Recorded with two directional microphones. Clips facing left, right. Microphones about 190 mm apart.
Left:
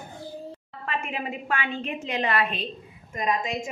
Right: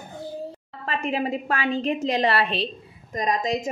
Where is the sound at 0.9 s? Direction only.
35° right (ahead or behind).